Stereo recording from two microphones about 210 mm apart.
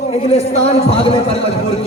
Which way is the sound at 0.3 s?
30° left (ahead or behind).